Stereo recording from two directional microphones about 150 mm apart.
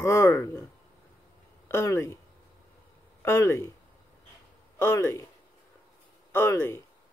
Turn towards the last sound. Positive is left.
turn(degrees=20)  # may be behind; listen again after turning